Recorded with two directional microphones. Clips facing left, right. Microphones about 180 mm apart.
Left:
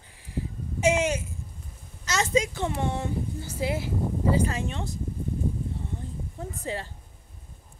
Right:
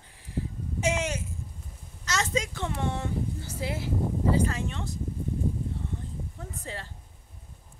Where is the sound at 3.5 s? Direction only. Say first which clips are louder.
Left 3 dB; 10° left (ahead or behind).